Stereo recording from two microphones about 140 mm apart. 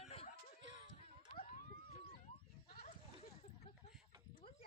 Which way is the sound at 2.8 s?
50° left (ahead or behind).